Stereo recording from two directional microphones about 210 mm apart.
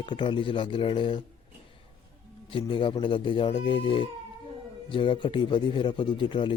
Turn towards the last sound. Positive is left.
turn(degrees=25)  # may be behind; listen again after turning